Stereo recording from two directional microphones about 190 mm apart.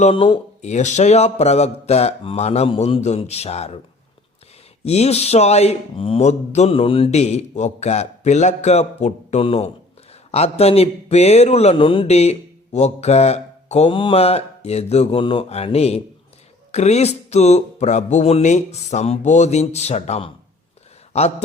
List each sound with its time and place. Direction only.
0.0 s speech: 25° left (ahead or behind)
4.8 s speech: 35° left (ahead or behind)